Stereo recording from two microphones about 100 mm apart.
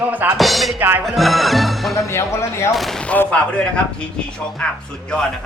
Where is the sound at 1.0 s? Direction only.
Centre (ahead or behind).